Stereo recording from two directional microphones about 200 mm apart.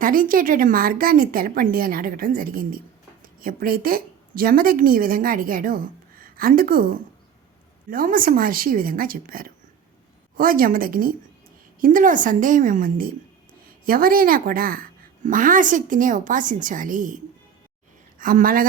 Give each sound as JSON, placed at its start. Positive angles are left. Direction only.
{"t": 0.0, "sound": "a woman's voice", "side_deg": -45}
{"t": 18.2, "sound": "a woman's voice", "side_deg": -40}